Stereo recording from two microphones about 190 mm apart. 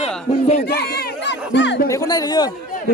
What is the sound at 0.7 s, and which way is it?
Music, 60° left (ahead or behind).